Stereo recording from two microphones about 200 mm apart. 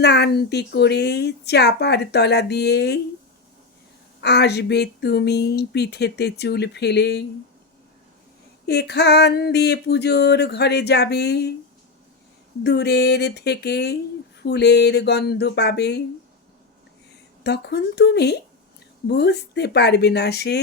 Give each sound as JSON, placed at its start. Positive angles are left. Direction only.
{"t": 0.0, "sound": "speech", "side_deg": 55}
{"t": 4.2, "sound": "speech", "side_deg": 55}
{"t": 8.6, "sound": "speech", "side_deg": 55}
{"t": 12.6, "sound": "speech", "side_deg": 55}
{"t": 17.4, "sound": "speech", "side_deg": 55}